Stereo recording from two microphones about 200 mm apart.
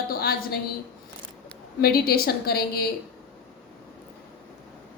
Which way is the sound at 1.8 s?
50° left (ahead or behind).